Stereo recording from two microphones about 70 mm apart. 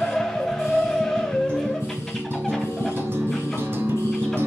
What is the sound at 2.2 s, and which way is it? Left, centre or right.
Music, left.